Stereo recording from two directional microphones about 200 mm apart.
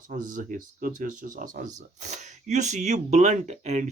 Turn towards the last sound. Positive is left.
turn(degrees=-35)  # may be behind; listen again after turning